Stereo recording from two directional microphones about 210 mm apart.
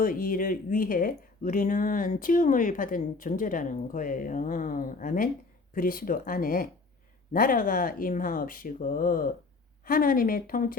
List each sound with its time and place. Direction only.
0.0 s speech: 40° left (ahead or behind)